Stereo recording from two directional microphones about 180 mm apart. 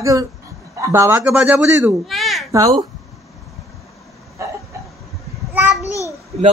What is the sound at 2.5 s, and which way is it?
Speech, 25° right (ahead or behind).